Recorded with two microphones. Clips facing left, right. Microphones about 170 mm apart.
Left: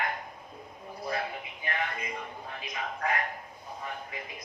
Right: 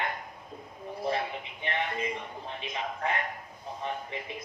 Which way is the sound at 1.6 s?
25° right (ahead or behind).